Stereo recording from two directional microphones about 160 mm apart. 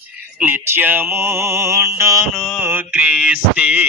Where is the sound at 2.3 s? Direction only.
Centre (ahead or behind).